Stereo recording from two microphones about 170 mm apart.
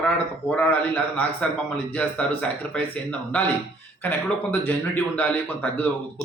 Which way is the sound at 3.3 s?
10° left (ahead or behind).